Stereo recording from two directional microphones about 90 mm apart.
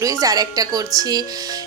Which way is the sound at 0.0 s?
40° right (ahead or behind).